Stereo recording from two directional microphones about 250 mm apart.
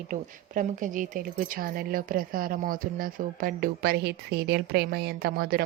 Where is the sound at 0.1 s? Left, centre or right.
Right.